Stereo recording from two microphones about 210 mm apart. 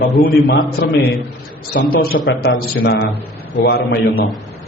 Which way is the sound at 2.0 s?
50° left (ahead or behind).